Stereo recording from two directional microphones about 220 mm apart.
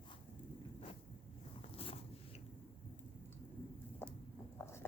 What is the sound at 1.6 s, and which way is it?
Zipper, 25° left (ahead or behind).